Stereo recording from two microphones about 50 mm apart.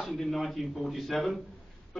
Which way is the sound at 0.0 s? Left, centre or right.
Centre.